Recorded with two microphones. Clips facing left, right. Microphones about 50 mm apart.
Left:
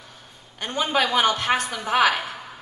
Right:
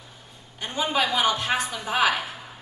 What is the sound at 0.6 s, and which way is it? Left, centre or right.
A man's voice, left.